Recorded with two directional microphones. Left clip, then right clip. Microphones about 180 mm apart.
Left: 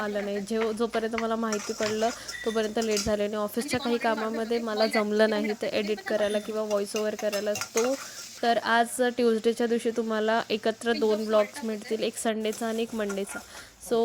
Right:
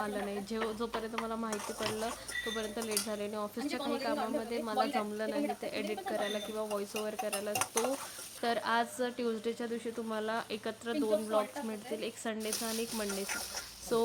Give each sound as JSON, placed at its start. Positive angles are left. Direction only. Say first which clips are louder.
{"t": 0.0, "sound": "speech", "louder": "left 7 dB", "side_deg": 30}
{"t": 7.0, "sound": "stir", "louder": "left 8 dB", "side_deg": 25}
{"t": 8.4, "sound": "speech", "louder": "left 8 dB", "side_deg": 25}
{"t": 13.9, "sound": "speech", "louder": "left 6 dB", "side_deg": 15}